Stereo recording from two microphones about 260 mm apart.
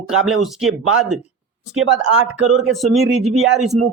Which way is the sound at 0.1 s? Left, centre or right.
Centre.